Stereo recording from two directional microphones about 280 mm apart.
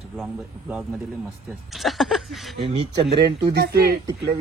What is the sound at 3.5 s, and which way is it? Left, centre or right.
Speech, right.